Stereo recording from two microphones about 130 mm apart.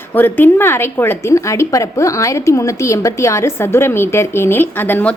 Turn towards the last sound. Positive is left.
turn(degrees=15)  # may be behind; listen again after turning